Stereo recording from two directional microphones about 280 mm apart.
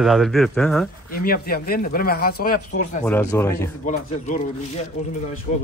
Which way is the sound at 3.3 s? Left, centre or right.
Centre.